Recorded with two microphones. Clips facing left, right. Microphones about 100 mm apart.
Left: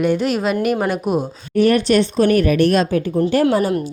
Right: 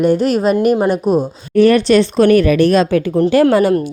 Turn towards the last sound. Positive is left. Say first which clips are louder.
# right 5 dB
turn(degrees=-80)